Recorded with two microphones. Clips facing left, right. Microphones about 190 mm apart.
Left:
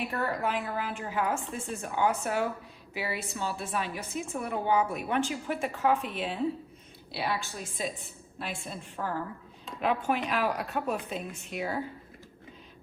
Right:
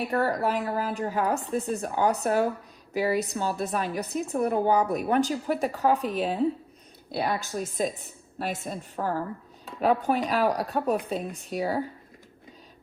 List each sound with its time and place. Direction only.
0.0 s a woman's voice: 35° right (ahead or behind)